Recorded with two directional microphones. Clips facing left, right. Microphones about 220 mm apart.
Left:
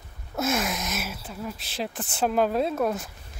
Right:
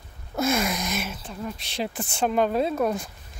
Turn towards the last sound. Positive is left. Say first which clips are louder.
# right 1 dB
turn(degrees=0)  # may be behind; listen again after turning